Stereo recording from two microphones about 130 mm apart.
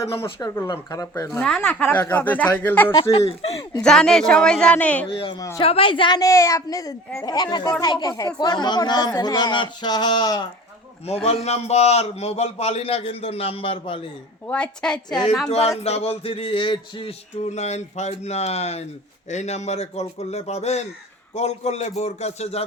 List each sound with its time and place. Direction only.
0.0 s a woman's voice: 20° left (ahead or behind)
1.6 s speech: 15° left (ahead or behind)
2.9 s a man's voice: 45° left (ahead or behind)
3.8 s a woman's voice: 5° left (ahead or behind)
5.1 s a man's voice: 45° left (ahead or behind)
5.4 s a woman's voice: 25° left (ahead or behind)
5.6 s a woman's voice: 45° left (ahead or behind)
11.0 s a man's voice: 50° left (ahead or behind)
14.4 s speech: 10° left (ahead or behind)
15.4 s a man's voice: 55° left (ahead or behind)
17.5 s a man's voice: 60° left (ahead or behind)